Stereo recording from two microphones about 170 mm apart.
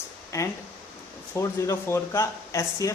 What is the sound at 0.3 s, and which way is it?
Speech, 15° left (ahead or behind).